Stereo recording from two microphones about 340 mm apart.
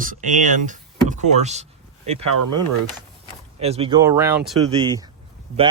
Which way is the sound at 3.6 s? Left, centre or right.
Centre.